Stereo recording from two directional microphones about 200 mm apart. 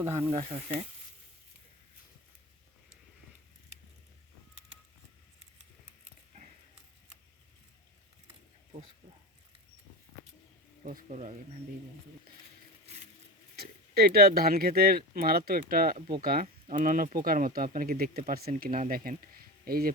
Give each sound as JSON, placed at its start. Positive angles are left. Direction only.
{"t": 0.2, "sound": "speech", "side_deg": -30}
{"t": 10.8, "sound": "speech", "side_deg": -40}
{"t": 13.6, "sound": "speech", "side_deg": -50}